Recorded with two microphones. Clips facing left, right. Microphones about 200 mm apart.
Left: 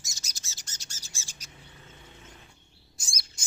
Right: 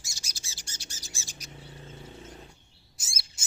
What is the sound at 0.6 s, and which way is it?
Bird, 10° right (ahead or behind).